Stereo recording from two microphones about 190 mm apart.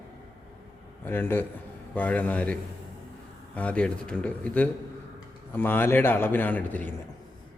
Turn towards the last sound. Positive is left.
turn(degrees=10)  # may be behind; listen again after turning